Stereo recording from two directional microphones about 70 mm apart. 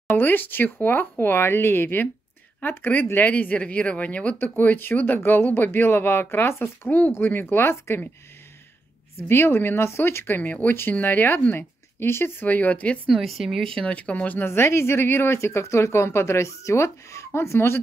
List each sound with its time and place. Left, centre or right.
0.1 s speech: left
9.3 s speech: left
12.4 s speech: left
13.1 s speech: centre
13.8 s speech: centre
14.4 s speech: left